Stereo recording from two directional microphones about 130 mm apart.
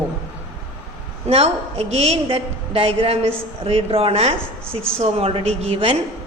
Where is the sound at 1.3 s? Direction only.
50° right (ahead or behind).